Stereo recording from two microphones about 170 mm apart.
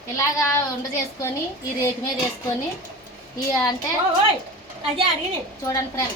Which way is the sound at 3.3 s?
25° left (ahead or behind).